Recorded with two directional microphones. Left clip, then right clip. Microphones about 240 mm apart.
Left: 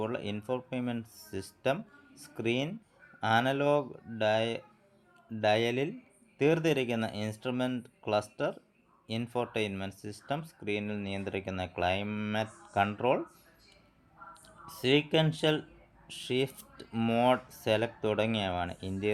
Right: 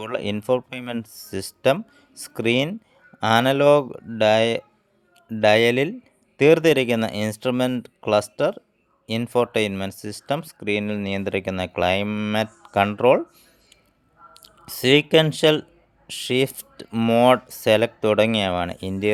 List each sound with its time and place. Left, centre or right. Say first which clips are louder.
0.0 s speech: right 9 dB; right
14.3 s speech: right 9 dB; right